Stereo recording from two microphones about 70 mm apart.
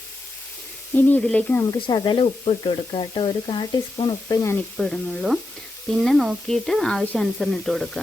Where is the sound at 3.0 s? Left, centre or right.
Left.